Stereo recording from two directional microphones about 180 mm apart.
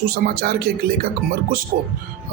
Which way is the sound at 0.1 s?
60° right (ahead or behind).